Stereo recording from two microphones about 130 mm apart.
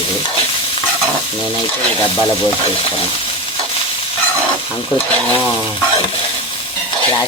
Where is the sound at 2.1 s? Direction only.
15° left (ahead or behind).